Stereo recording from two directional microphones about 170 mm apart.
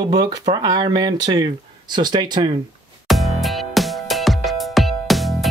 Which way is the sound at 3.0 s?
Centre (ahead or behind).